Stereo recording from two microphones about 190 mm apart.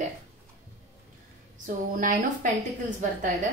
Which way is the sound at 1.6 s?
45° right (ahead or behind).